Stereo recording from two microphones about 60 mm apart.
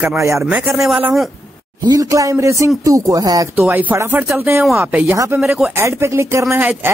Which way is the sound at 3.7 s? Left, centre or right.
Right.